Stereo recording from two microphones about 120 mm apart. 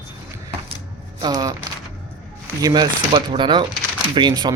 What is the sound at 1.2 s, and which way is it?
Speech, 35° right (ahead or behind).